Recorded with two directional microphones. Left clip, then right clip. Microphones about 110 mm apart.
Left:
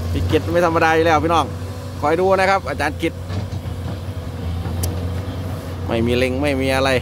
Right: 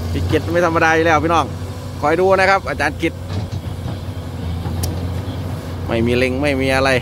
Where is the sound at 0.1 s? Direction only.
25° left (ahead or behind).